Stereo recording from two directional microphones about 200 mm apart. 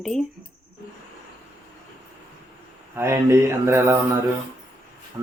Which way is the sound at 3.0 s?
10° right (ahead or behind).